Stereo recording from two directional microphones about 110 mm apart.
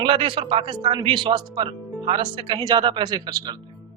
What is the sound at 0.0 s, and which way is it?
A man's voice, 50° right (ahead or behind).